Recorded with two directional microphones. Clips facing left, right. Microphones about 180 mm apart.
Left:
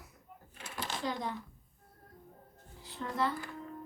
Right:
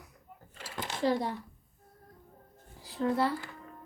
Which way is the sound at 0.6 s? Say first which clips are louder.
Right 6 dB; 25° right (ahead or behind).